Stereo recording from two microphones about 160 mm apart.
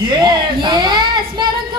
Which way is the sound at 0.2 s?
25° right (ahead or behind).